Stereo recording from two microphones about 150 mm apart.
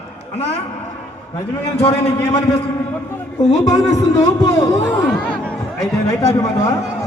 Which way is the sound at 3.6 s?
25° left (ahead or behind).